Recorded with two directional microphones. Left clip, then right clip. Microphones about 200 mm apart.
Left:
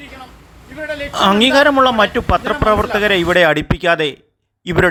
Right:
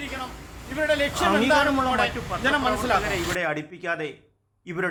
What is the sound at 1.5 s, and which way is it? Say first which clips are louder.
Speech: left 10 dB; 40° left (ahead or behind).